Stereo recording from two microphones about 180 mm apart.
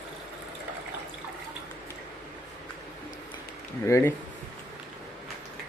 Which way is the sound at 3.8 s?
15° left (ahead or behind).